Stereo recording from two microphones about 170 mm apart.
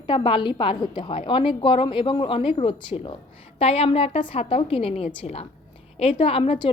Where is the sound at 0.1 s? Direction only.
30° left (ahead or behind).